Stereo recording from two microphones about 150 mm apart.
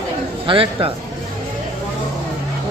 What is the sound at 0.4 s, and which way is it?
Speech, 35° right (ahead or behind).